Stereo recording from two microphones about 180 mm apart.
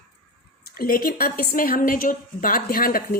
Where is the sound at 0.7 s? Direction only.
55° left (ahead or behind).